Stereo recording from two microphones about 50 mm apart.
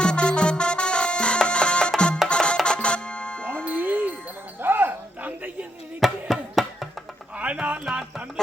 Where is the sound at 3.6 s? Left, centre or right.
Right.